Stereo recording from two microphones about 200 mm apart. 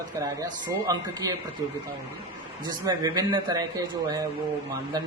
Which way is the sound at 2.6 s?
20° right (ahead or behind).